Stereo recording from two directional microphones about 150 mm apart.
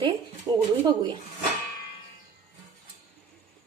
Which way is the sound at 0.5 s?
25° right (ahead or behind).